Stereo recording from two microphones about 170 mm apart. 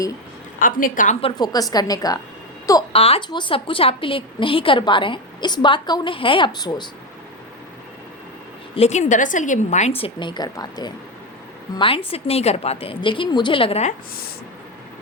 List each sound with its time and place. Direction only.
0.6 s a woman's voice: 55° left (ahead or behind)
1.2 s a woman's voice: 25° left (ahead or behind)
2.9 s a woman's voice: 35° left (ahead or behind)
8.7 s a woman's voice: 40° left (ahead or behind)
10.0 s a woman's voice: 25° left (ahead or behind)